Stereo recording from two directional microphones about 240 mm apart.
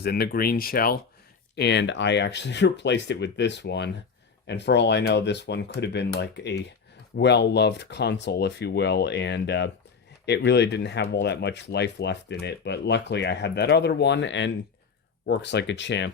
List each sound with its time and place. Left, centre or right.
0.0 s speech: left